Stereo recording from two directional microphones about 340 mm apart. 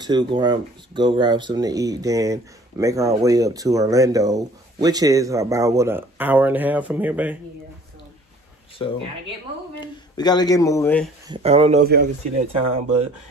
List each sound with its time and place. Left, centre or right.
0.0 s speech: centre
8.8 s speech: centre
11.2 s speech: centre